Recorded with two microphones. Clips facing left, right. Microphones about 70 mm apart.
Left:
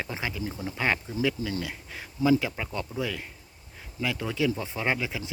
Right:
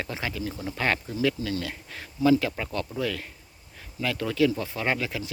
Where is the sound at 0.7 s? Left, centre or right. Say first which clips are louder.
Right 1 dB; centre.